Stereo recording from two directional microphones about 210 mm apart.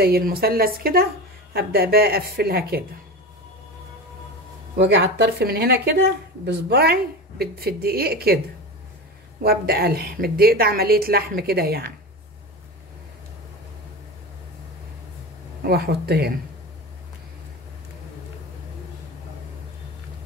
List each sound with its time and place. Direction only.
0.0 s speech: 45° right (ahead or behind)
4.7 s speech: 55° right (ahead or behind)
9.4 s speech: 45° right (ahead or behind)
15.6 s speech: 50° right (ahead or behind)